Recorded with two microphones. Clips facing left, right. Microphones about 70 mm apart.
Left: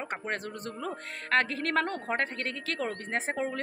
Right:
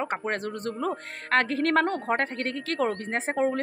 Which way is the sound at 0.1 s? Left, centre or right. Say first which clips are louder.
Right 5 dB; right.